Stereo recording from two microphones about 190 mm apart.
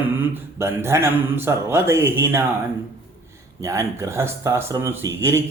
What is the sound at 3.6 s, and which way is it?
Speech, 15° right (ahead or behind).